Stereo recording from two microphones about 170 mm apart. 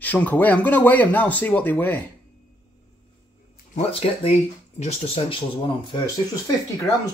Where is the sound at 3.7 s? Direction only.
35° left (ahead or behind).